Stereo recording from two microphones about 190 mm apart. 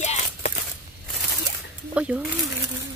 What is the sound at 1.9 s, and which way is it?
Speech, 5° right (ahead or behind).